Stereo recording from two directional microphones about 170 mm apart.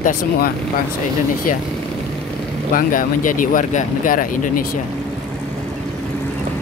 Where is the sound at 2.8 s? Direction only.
55° left (ahead or behind).